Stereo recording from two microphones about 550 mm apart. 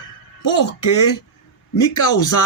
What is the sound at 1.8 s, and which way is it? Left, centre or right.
Speech, left.